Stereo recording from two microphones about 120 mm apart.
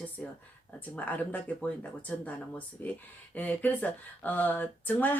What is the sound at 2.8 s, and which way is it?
Speech, 15° left (ahead or behind).